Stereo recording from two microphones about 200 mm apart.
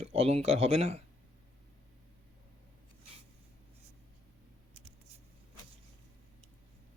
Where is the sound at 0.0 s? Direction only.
30° right (ahead or behind).